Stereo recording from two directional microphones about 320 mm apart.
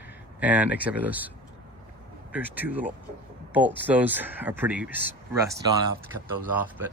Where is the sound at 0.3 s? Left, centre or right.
Centre.